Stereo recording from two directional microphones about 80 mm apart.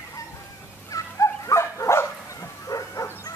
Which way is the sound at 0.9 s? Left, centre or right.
Left.